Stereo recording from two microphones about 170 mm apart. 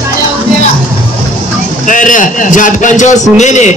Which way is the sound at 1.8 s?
50° left (ahead or behind).